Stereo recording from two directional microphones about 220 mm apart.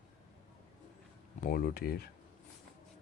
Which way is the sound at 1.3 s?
40° left (ahead or behind).